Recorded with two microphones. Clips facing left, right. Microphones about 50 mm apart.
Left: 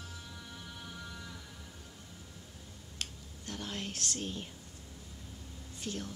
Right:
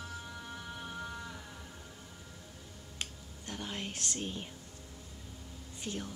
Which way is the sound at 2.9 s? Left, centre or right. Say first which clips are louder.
Even; centre.